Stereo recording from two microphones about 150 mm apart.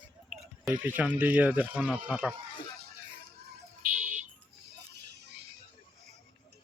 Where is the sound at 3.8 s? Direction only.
60° right (ahead or behind).